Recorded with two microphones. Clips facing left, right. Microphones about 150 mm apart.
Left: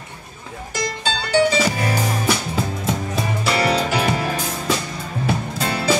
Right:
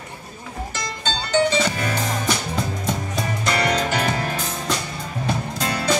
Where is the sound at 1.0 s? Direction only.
10° left (ahead or behind).